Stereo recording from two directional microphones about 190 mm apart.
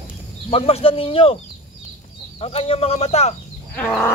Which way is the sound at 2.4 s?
30° left (ahead or behind).